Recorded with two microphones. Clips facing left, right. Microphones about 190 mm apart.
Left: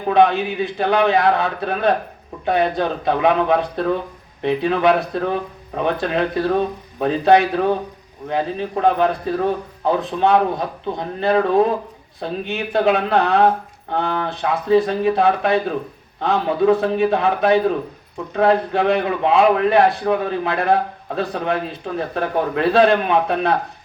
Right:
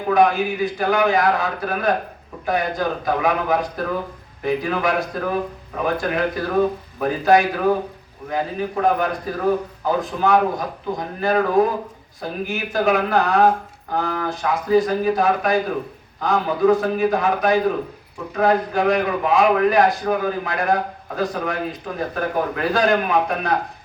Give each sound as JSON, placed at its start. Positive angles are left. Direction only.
{"t": 0.1, "sound": "a man's voice", "side_deg": 30}